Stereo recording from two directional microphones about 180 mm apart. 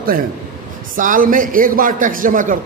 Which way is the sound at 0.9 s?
50° right (ahead or behind).